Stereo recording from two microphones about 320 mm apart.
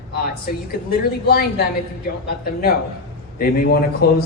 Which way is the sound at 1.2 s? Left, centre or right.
Left.